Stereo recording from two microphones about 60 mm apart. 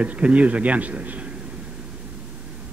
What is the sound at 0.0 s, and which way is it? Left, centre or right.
Speech, right.